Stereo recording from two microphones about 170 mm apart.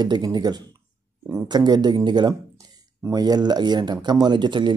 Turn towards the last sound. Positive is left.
turn(degrees=-25)  # may be behind; listen again after turning